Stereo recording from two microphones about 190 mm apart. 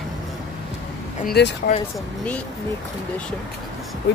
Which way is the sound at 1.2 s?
60° left (ahead or behind).